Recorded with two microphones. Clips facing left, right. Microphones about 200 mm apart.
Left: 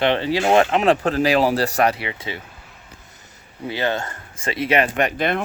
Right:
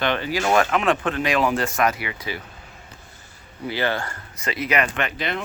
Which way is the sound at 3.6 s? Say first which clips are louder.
Left 1 dB; 20° left (ahead or behind).